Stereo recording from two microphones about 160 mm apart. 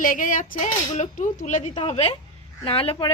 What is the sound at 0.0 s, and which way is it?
Speech, 55° left (ahead or behind).